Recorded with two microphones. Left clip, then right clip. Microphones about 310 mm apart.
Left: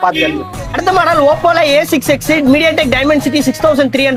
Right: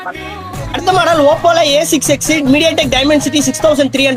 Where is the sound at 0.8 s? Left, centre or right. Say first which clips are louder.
Even; centre.